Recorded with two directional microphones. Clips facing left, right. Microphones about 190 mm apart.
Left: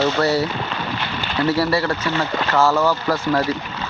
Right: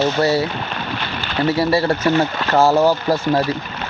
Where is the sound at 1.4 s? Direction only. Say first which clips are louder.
Right 2 dB; 25° right (ahead or behind).